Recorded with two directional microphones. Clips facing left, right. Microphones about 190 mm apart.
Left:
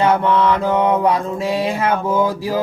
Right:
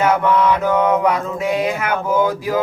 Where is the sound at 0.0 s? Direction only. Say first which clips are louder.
Even; 30° left (ahead or behind).